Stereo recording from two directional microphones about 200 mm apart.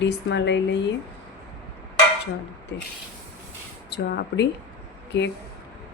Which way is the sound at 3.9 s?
55° left (ahead or behind).